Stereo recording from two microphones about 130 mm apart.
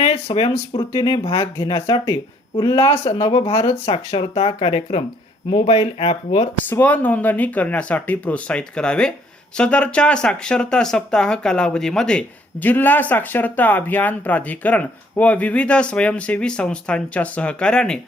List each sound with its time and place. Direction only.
0.0 s speech: 50° left (ahead or behind)
2.6 s speech: 25° left (ahead or behind)
3.1 s speech: 45° left (ahead or behind)
6.7 s speech: 15° left (ahead or behind)